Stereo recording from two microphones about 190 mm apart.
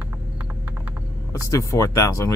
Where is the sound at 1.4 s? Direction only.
15° left (ahead or behind).